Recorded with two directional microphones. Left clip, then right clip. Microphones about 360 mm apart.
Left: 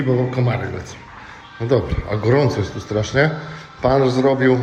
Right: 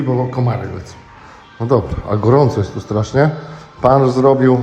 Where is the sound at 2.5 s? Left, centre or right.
Centre.